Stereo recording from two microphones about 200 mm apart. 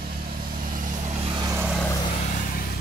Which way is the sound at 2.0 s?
30° left (ahead or behind).